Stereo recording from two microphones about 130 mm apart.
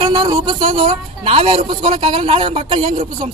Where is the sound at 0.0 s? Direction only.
45° right (ahead or behind).